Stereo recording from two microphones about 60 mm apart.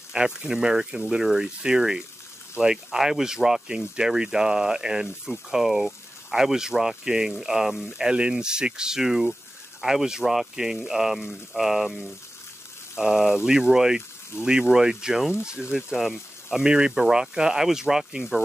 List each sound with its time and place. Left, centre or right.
0.1 s speech: centre